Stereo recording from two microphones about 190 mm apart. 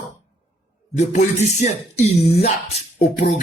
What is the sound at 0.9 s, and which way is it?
A man's voice, 35° left (ahead or behind).